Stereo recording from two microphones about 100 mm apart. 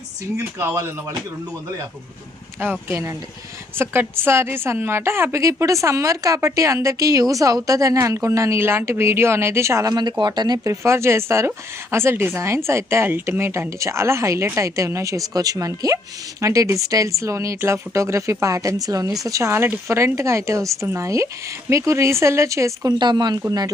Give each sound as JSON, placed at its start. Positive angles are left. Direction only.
{"t": 0.3, "sound": "a woman's voice", "side_deg": -25}
{"t": 2.6, "sound": "a woman's voice", "side_deg": -25}
{"t": 9.9, "sound": "speech", "side_deg": -45}
{"t": 10.7, "sound": "a woman's voice", "side_deg": -30}
{"t": 22.9, "sound": "speech", "side_deg": -45}